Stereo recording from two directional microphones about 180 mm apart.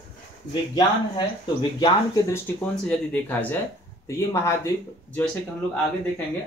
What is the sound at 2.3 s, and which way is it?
Speech, 10° left (ahead or behind).